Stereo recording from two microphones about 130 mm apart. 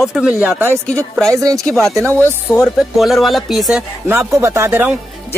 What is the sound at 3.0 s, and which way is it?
Speech, centre (ahead or behind).